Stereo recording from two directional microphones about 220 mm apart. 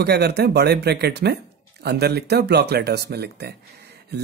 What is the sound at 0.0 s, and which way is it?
Speech, 45° right (ahead or behind).